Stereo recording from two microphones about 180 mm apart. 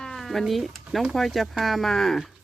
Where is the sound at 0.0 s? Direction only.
Centre (ahead or behind).